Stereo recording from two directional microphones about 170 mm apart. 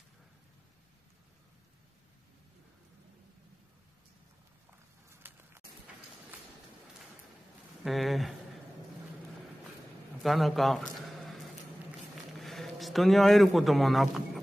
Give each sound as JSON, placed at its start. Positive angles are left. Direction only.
{"t": 5.2, "sound": "a sound", "side_deg": -15}
{"t": 7.8, "sound": "speech", "side_deg": 0}
{"t": 10.2, "sound": "a man's voice", "side_deg": 0}
{"t": 12.4, "sound": "speech", "side_deg": 0}